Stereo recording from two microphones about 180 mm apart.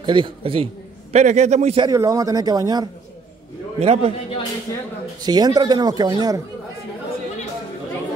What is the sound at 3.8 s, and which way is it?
Speech, 35° right (ahead or behind).